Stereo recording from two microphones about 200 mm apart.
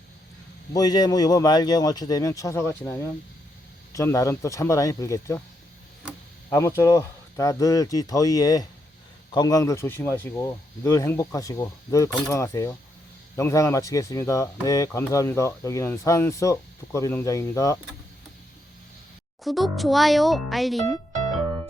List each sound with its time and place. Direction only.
0.7 s speech: 20° left (ahead or behind)
6.5 s speech: 15° left (ahead or behind)
19.5 s a child's voice: centre (ahead or behind)